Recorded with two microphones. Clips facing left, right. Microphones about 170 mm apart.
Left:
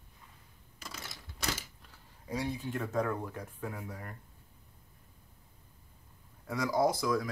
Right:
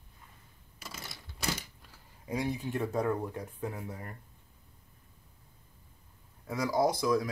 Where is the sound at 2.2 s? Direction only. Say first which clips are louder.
Right 2 dB; 15° right (ahead or behind).